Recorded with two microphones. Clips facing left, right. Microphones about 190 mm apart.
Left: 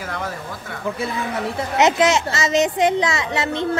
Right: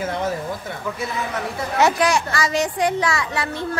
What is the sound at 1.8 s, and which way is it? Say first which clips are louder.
A woman's voice: left 2 dB; 20° left (ahead or behind).